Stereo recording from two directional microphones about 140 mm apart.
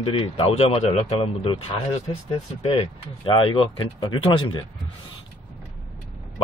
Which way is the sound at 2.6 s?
45° left (ahead or behind).